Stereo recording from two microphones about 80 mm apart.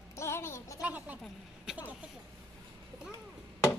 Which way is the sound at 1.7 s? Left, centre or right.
Centre.